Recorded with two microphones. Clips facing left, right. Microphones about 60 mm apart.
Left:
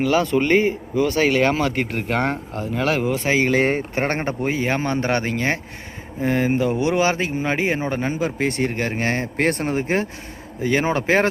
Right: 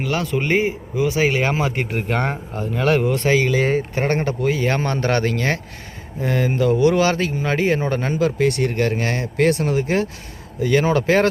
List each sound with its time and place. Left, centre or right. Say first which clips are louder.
0.0 s speech: left 4 dB; centre
3.5 s speech: even; left
4.7 s speech: right 1 dB; centre